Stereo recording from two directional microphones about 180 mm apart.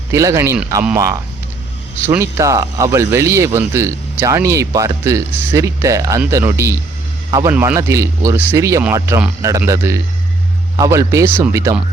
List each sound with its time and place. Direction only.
0.1 s speech: 15° right (ahead or behind)